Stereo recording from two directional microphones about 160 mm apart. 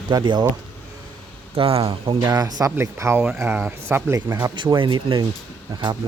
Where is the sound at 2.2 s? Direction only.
25° right (ahead or behind).